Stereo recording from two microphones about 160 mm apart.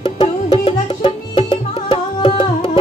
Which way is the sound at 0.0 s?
35° left (ahead or behind).